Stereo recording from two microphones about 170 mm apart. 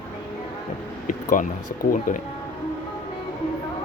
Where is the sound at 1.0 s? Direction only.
50° left (ahead or behind).